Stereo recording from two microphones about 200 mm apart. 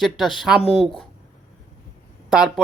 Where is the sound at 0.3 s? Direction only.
5° right (ahead or behind).